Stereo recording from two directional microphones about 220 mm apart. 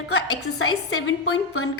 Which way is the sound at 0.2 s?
90° left.